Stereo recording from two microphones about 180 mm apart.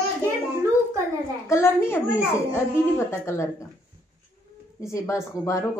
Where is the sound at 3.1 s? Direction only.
15° left (ahead or behind).